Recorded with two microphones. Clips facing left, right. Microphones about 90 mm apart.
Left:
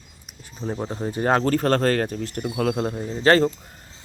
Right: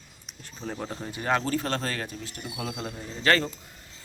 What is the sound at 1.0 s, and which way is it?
Speech, 40° left (ahead or behind).